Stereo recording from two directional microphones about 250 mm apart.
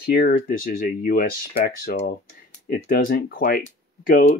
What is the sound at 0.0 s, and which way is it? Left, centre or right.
Speech, left.